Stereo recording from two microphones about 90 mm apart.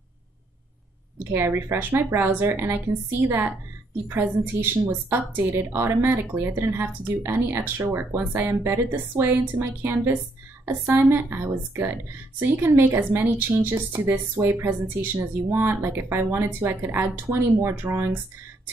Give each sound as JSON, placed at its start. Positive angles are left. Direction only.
{"t": 1.2, "sound": "speech", "side_deg": -25}